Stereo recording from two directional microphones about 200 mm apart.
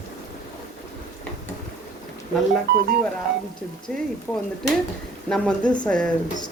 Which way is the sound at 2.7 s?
55° right (ahead or behind).